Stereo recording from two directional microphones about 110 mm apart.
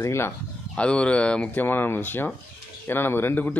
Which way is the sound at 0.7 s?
10° left (ahead or behind).